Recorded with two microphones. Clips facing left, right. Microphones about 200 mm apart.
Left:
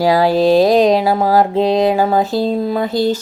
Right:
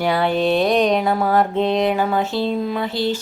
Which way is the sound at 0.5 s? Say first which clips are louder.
Left 6 dB; 90° left.